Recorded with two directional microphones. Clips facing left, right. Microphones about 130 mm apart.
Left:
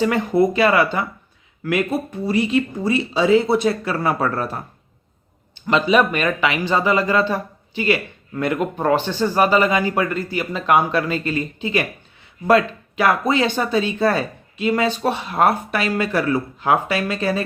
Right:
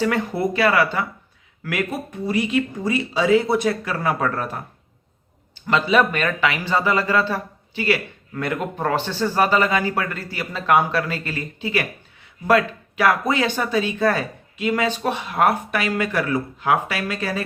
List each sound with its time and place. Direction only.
0.0 s speech: 20° left (ahead or behind)
2.2 s speech: 30° left (ahead or behind)
5.6 s a man's voice: 15° left (ahead or behind)
8.4 s a man's voice: 15° left (ahead or behind)